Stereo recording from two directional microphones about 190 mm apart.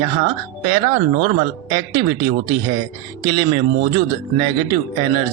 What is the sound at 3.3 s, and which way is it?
Speech, 25° right (ahead or behind).